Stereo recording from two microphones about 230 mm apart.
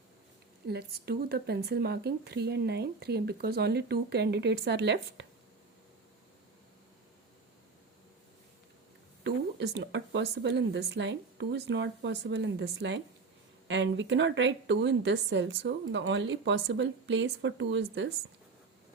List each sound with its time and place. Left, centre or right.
0.7 s speech: right
9.2 s speech: right